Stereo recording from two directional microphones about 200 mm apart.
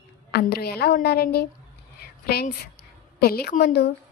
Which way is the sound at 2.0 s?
50° left (ahead or behind).